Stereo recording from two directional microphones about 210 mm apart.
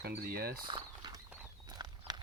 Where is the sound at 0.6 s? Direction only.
25° right (ahead or behind).